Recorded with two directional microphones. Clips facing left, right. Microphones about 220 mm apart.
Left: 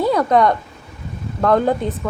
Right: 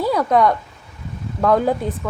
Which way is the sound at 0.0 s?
5° right (ahead or behind).